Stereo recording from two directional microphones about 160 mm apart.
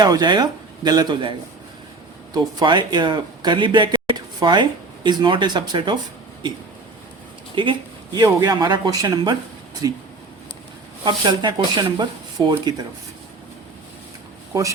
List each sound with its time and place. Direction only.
0.0 s speech: 25° right (ahead or behind)
2.3 s speech: 25° right (ahead or behind)
7.5 s speech: 30° right (ahead or behind)
11.0 s speech: 30° right (ahead or behind)